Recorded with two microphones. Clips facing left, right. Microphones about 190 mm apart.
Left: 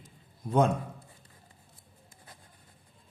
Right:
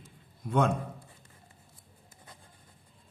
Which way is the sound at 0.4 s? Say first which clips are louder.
Left 2 dB; 35° left (ahead or behind).